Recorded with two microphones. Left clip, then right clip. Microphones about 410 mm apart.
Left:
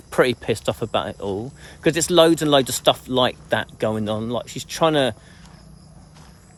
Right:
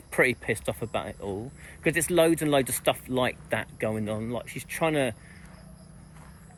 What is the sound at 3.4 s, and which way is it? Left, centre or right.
Speech, left.